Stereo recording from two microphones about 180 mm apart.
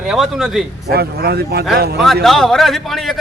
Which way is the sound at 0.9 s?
60° right (ahead or behind).